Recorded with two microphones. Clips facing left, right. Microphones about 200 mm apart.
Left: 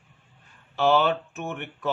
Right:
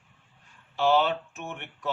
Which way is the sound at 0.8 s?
55° left (ahead or behind).